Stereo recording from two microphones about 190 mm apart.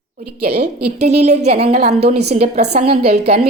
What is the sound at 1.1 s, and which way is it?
A woman's voice, 35° right (ahead or behind).